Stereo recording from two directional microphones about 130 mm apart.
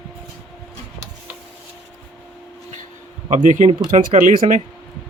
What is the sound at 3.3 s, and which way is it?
Speech, 85° right.